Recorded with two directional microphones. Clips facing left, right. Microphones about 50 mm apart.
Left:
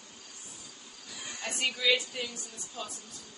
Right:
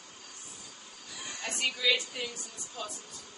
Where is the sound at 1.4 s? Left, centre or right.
Centre.